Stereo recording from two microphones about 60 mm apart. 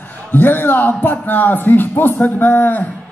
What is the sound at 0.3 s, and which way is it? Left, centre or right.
A man's voice, left.